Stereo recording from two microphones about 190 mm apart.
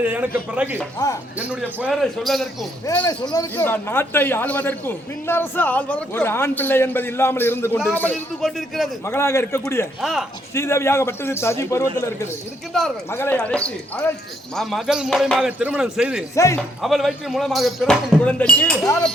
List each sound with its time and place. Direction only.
0.0 s a man's voice: 10° right (ahead or behind)
1.0 s speech: 20° left (ahead or behind)
1.8 s speech: centre (ahead or behind)
2.8 s a man's voice: 15° left (ahead or behind)
9.0 s a man's voice: 15° left (ahead or behind)
10.0 s speech: centre (ahead or behind)
10.5 s a man's voice: 15° left (ahead or behind)
13.1 s a man's voice: 10° left (ahead or behind); by 16.2 s 5° right (ahead or behind)
16.3 s a man's voice: 15° left (ahead or behind)
16.8 s speech: centre (ahead or behind)